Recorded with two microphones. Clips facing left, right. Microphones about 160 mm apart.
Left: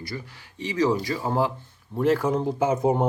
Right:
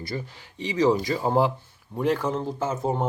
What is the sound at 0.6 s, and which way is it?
Speech, 20° right (ahead or behind).